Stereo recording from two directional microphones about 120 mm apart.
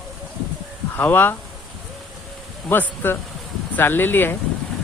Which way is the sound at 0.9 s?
15° left (ahead or behind).